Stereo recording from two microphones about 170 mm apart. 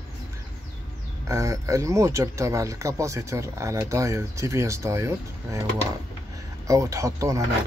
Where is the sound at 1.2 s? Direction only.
20° right (ahead or behind).